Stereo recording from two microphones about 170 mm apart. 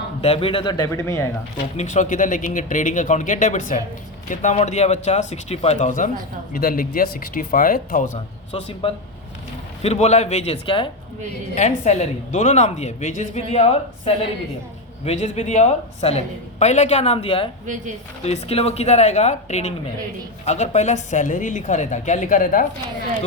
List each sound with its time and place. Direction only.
0.2 s a man's voice: 35° left (ahead or behind); by 1.3 s 15° left (ahead or behind)
1.7 s speech: 45° left (ahead or behind)
6.5 s speech: 55° left (ahead or behind)
8.5 s speech: 35° left (ahead or behind)
9.8 s speech: 40° left (ahead or behind)
11.5 s speech: 45° left (ahead or behind)